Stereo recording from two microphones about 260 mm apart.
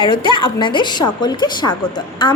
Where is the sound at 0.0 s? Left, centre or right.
Centre.